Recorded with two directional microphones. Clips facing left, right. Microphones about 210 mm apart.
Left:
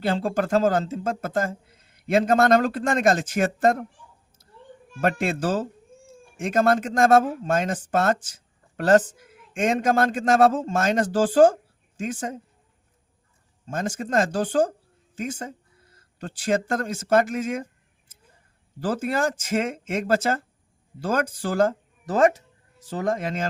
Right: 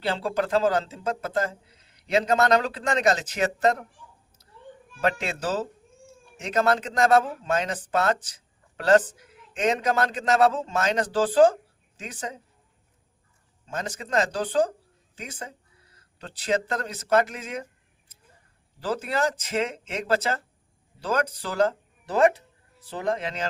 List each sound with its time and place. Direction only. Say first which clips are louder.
0.0 s speech: left 3 dB; 50° left (ahead or behind)
4.9 s speech: left 3 dB; 50° left (ahead or behind)
13.7 s speech: left 4 dB; 50° left (ahead or behind)
18.8 s speech: left 2 dB; 50° left (ahead or behind)